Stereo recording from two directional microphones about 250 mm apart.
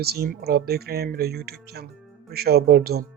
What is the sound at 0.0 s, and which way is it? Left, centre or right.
Speech, right.